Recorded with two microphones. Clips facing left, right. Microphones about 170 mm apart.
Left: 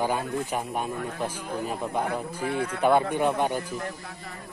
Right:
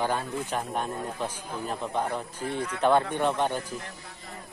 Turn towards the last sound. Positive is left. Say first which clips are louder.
# left 2 dB
turn(degrees=10)  # may be behind; listen again after turning